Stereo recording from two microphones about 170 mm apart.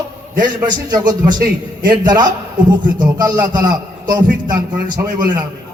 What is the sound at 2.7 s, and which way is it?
A man's voice, 25° right (ahead or behind).